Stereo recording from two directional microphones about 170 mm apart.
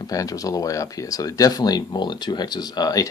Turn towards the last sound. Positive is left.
turn(degrees=20)  # may be behind; listen again after turning